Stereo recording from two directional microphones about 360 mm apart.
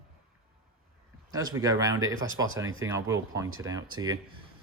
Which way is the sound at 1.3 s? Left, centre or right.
Centre.